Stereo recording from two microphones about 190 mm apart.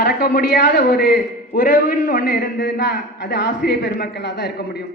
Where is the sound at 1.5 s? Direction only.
45° left (ahead or behind).